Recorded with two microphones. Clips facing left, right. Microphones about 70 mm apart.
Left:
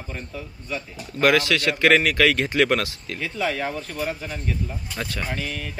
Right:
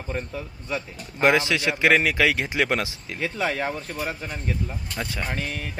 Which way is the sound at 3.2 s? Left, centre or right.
Right.